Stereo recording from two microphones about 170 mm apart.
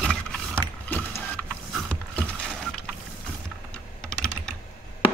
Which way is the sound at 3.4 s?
5° left (ahead or behind).